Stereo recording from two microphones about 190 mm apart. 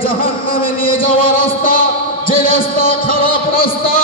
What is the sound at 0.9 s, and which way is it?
Speech, 45° left (ahead or behind).